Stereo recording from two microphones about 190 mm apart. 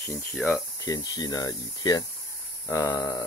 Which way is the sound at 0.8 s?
20° left (ahead or behind).